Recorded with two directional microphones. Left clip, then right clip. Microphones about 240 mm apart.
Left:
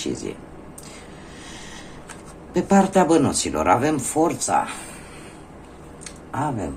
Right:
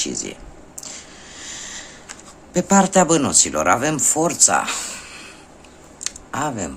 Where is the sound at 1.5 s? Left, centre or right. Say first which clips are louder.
Right 7 dB; right.